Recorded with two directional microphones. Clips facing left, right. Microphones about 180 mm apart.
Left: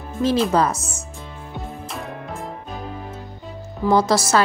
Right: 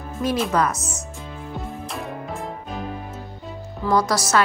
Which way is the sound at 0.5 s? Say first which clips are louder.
Left 2 dB; 30° left (ahead or behind).